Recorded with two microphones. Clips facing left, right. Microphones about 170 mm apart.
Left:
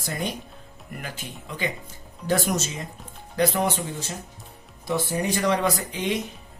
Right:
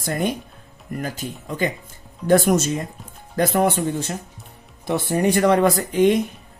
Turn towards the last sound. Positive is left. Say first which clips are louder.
# right 9 dB
turn(degrees=-50)  # may be behind; listen again after turning